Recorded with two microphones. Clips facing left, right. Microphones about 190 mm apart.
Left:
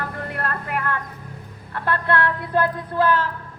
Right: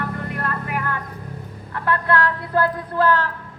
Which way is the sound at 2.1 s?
20° left (ahead or behind).